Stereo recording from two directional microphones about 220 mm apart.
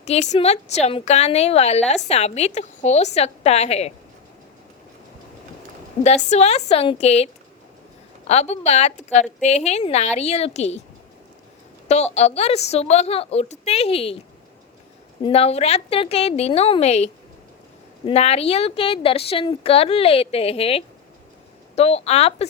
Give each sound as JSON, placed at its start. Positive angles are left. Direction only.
{"t": 0.0, "sound": "a woman's voice", "side_deg": 30}
{"t": 6.3, "sound": "a woman's voice", "side_deg": 30}
{"t": 8.3, "sound": "a woman's voice", "side_deg": 30}
{"t": 12.1, "sound": "a woman's voice", "side_deg": 30}
{"t": 15.2, "sound": "a woman's voice", "side_deg": 25}